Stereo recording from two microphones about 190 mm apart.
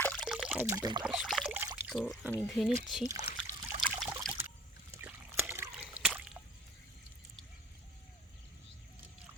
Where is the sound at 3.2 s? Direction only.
40° right (ahead or behind).